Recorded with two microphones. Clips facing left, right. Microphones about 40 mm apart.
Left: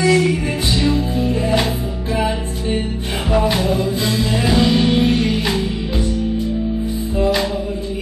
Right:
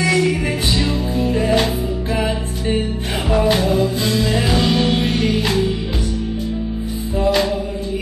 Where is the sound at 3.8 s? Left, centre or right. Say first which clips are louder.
Right 1 dB; left.